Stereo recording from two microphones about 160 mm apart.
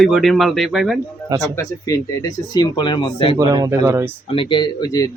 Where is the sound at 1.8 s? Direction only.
20° left (ahead or behind).